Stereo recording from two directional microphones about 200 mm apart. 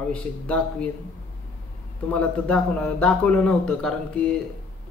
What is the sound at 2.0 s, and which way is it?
Speech, 5° left (ahead or behind).